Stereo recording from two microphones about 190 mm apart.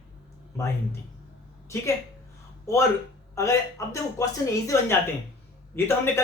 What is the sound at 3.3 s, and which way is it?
Speech, 15° left (ahead or behind).